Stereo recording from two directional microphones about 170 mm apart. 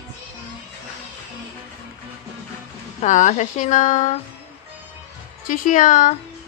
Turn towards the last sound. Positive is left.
turn(degrees=50)  # may be behind; listen again after turning